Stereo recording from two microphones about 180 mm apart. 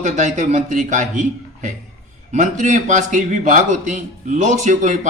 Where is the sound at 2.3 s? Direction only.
45° right (ahead or behind).